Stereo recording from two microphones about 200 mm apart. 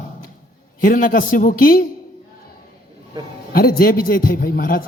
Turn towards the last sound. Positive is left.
turn(degrees=45)  # may be behind; listen again after turning